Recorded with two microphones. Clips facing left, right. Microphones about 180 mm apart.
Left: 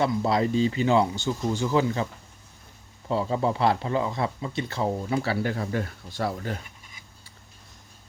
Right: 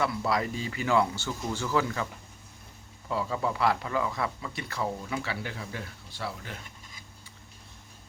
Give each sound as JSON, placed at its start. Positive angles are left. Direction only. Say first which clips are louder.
{"t": 0.0, "sound": "speech", "louder": "left 5 dB", "side_deg": 25}
{"t": 3.1, "sound": "speech", "louder": "left 5 dB", "side_deg": 30}